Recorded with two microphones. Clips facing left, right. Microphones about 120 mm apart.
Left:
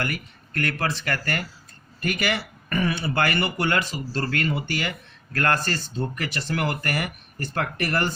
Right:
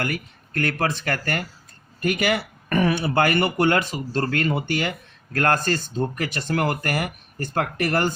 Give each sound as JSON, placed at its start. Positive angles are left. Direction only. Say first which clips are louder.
{"t": 0.0, "sound": "speech", "louder": "right 2 dB", "side_deg": -35}